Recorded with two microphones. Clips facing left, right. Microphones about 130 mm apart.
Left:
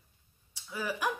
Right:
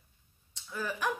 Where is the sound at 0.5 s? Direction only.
10° left (ahead or behind).